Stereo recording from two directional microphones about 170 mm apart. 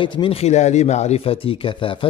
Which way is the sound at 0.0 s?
30° left (ahead or behind).